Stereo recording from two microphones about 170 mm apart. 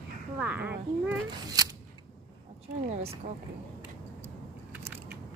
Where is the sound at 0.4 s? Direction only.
10° right (ahead or behind).